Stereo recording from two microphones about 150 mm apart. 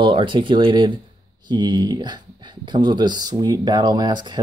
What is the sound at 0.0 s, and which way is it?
Speech, 35° right (ahead or behind).